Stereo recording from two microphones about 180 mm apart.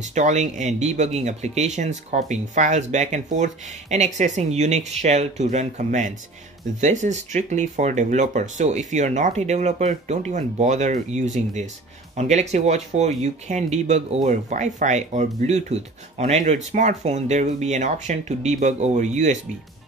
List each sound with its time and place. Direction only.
0.1 s speech: 40° right (ahead or behind)